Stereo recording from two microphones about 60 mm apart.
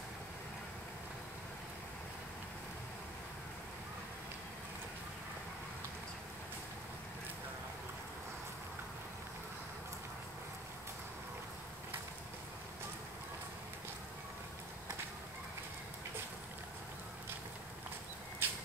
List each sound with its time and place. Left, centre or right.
18.4 s vehicle: right